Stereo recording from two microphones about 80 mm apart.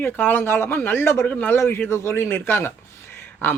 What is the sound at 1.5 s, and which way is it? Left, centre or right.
A man's voice, left.